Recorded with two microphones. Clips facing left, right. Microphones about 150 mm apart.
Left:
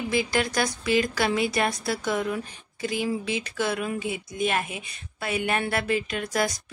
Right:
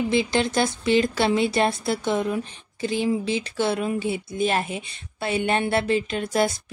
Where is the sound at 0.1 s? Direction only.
25° right (ahead or behind).